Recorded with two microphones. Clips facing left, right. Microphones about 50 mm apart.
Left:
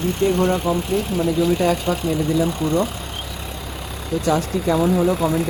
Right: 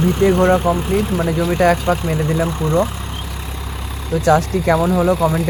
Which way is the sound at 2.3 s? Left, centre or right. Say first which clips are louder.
Right 2 dB; right.